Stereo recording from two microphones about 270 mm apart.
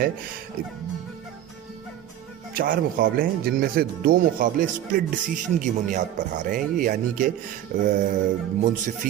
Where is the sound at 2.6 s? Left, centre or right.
Right.